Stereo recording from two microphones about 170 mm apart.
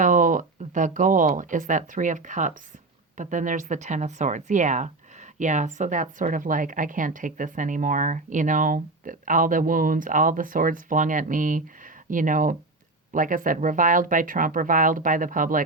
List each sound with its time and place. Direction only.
0.0 s a woman's voice: 50° right (ahead or behind)